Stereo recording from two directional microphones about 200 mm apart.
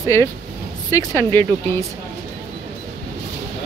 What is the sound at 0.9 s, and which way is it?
Speech, 15° left (ahead or behind).